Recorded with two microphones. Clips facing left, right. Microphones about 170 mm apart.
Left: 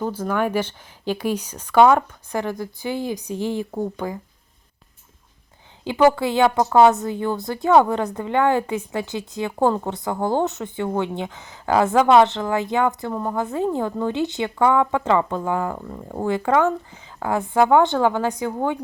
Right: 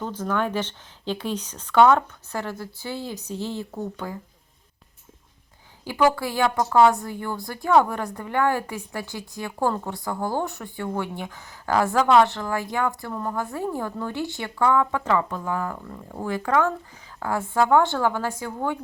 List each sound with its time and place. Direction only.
0.0 s speech: 10° left (ahead or behind)
5.8 s speech: 20° left (ahead or behind)